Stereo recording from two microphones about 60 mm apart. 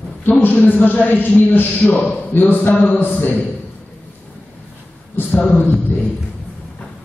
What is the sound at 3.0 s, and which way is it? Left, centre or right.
Speech, left.